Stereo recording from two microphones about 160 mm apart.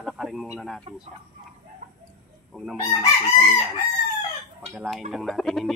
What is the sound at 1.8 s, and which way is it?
Bird, 50° right (ahead or behind).